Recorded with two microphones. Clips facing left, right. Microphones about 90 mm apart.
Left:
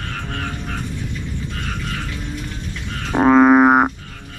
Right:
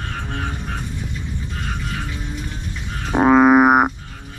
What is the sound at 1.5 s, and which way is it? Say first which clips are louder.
Music: right 2 dB; 5° right (ahead or behind).